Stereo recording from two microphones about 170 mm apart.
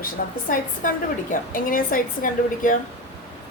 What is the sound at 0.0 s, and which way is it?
A woman's voice, 55° left (ahead or behind).